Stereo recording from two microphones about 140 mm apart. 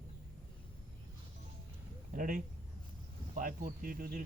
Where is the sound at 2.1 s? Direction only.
75° right (ahead or behind).